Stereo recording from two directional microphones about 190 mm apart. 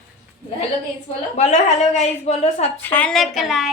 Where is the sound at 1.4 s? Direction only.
35° left (ahead or behind).